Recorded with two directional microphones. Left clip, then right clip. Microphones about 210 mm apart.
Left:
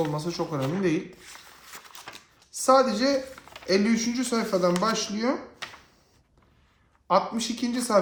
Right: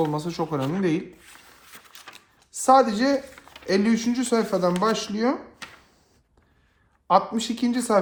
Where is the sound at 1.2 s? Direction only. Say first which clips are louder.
Left 2 dB; 5° left (ahead or behind).